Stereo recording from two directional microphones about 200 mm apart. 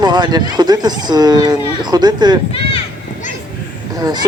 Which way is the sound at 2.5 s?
25° left (ahead or behind).